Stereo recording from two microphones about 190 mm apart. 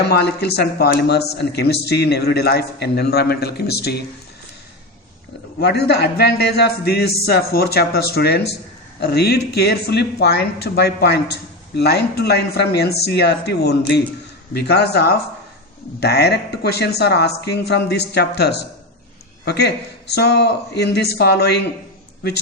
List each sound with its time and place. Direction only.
0.0 s a man's voice: 60° left (ahead or behind)
5.5 s a man's voice: 60° left (ahead or behind)